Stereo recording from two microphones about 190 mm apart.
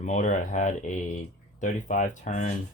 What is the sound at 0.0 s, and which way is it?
Speech, 40° left (ahead or behind).